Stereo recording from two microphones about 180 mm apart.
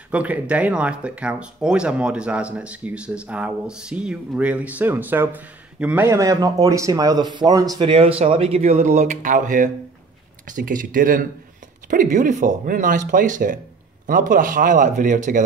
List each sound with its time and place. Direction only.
0.1 s speech: 10° right (ahead or behind); by 15.4 s 45° right (ahead or behind)